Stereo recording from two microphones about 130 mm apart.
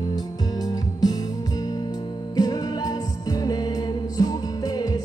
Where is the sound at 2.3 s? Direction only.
30° left (ahead or behind).